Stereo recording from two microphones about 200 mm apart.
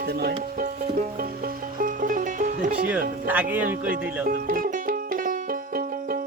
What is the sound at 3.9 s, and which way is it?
Music, 45° right (ahead or behind).